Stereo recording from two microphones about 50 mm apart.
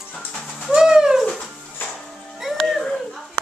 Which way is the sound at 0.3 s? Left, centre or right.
Centre.